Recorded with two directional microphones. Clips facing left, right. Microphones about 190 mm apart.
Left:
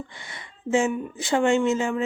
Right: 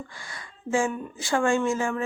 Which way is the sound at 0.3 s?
20° left (ahead or behind).